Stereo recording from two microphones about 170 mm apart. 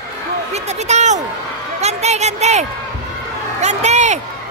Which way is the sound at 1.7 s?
40° right (ahead or behind).